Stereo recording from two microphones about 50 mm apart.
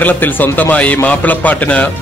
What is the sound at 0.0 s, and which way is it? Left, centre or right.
A man's voice, left.